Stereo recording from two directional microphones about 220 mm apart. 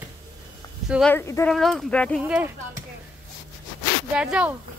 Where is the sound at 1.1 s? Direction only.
10° left (ahead or behind).